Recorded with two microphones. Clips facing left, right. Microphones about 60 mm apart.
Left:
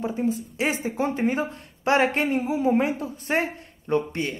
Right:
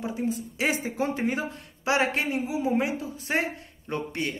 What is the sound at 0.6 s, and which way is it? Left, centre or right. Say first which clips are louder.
A woman's voice: even; left.